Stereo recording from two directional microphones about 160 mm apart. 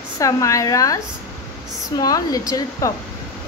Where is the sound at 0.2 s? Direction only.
20° left (ahead or behind).